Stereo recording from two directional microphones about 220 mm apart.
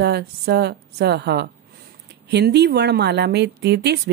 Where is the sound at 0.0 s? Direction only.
50° right (ahead or behind).